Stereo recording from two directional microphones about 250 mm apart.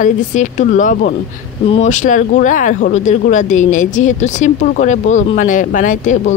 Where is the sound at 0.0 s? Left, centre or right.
Left.